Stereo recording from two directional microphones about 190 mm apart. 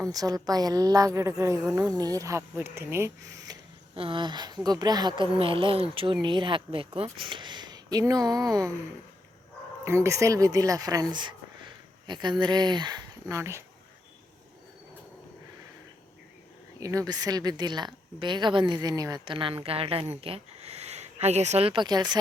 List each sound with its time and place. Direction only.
0.0 s speech: 20° right (ahead or behind)
3.4 s speech: 25° right (ahead or behind)
9.8 s speech: 15° right (ahead or behind)
16.8 s speech: 20° right (ahead or behind)